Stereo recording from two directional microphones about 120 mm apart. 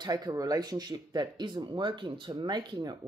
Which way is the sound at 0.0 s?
30° right (ahead or behind).